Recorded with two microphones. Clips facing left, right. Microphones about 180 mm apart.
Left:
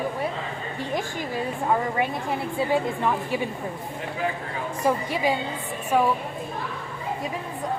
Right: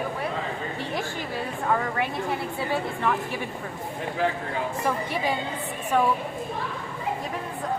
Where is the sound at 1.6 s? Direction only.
20° left (ahead or behind).